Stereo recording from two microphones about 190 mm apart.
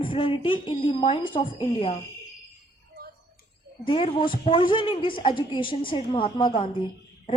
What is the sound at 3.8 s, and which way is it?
A woman's voice, 25° left (ahead or behind).